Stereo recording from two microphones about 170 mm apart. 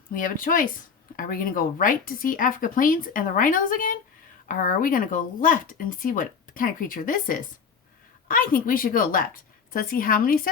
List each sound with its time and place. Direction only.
0.1 s a woman's voice: 55° left (ahead or behind)